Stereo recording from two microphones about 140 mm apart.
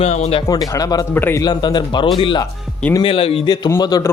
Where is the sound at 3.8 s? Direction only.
25° left (ahead or behind).